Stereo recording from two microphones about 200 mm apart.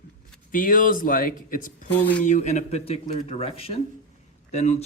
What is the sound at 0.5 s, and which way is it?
Speech, 45° left (ahead or behind).